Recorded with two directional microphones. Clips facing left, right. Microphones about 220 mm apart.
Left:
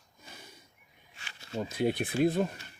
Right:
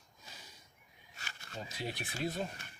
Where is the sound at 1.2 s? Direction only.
40° right (ahead or behind).